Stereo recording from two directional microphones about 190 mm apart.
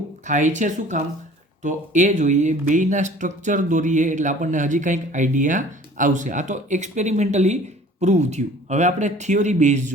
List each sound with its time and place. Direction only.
0.3 s speech: 40° right (ahead or behind)